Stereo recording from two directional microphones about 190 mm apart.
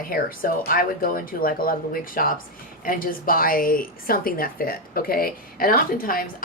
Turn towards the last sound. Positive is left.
turn(degrees=45)  # may be behind; listen again after turning